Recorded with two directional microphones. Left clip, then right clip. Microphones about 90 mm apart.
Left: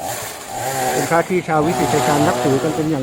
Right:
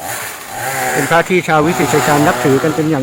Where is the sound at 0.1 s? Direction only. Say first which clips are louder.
Right 3 dB; 25° left (ahead or behind).